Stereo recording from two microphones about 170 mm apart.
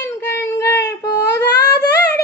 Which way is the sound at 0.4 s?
15° left (ahead or behind).